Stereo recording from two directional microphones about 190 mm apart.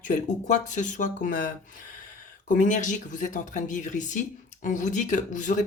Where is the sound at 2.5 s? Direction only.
40° left (ahead or behind).